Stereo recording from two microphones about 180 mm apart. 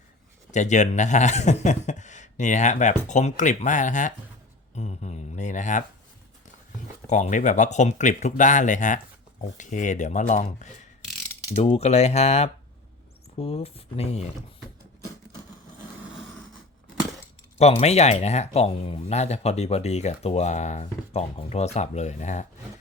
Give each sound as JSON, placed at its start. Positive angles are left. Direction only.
{"t": 0.5, "sound": "speech", "side_deg": 40}
{"t": 7.1, "sound": "speech", "side_deg": 45}
{"t": 17.6, "sound": "speech", "side_deg": 35}